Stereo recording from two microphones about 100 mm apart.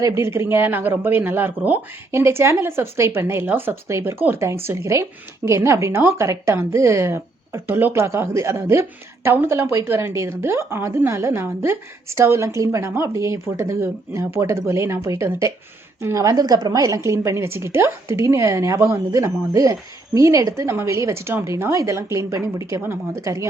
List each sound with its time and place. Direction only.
0.1 s a woman's voice: 25° right (ahead or behind)